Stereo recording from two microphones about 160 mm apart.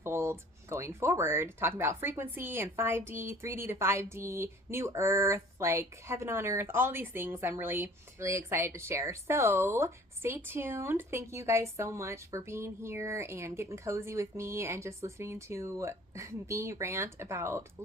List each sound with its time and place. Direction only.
0.0 s speech: 15° right (ahead or behind)